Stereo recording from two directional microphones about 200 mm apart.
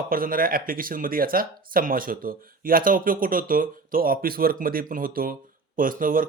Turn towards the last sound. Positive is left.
turn(degrees=-45)  # may be behind; listen again after turning